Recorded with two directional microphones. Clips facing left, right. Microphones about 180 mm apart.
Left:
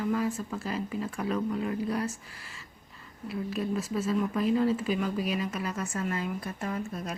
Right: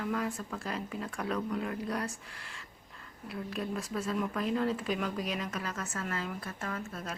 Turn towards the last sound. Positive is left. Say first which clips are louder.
# left 5 dB
turn(degrees=15)  # may be behind; listen again after turning